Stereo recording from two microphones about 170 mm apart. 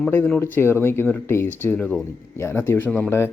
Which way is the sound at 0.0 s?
10° left (ahead or behind).